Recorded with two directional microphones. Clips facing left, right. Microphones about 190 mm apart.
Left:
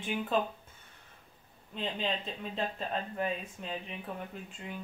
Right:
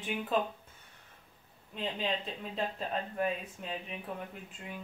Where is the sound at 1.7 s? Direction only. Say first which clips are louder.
Even; 5° right (ahead or behind).